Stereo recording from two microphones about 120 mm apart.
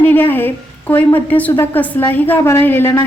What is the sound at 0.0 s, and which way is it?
A woman's voice, 15° left (ahead or behind).